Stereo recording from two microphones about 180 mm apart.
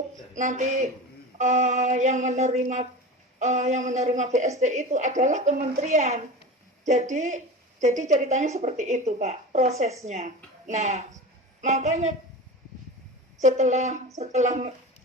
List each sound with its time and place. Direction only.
0.3 s a woman's voice: 40° right (ahead or behind)
13.4 s a woman's voice: 40° right (ahead or behind)